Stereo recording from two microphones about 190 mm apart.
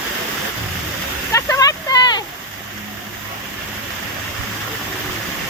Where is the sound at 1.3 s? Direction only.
15° left (ahead or behind).